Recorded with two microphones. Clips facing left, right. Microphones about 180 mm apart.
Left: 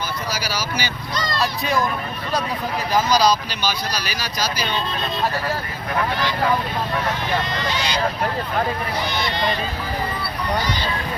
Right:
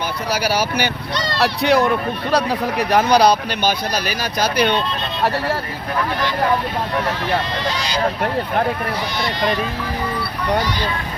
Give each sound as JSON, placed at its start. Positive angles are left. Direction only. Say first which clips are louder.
{"t": 0.3, "sound": "speech", "louder": "right 7 dB", "side_deg": -60}